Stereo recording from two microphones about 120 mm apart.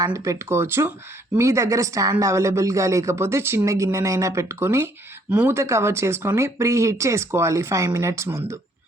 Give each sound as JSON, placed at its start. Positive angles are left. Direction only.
{"t": 0.0, "sound": "speech", "side_deg": -25}